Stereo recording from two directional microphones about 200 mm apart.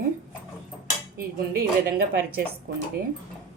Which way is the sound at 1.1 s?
50° right (ahead or behind).